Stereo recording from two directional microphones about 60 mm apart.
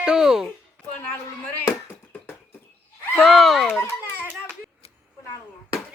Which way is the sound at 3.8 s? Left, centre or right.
Left.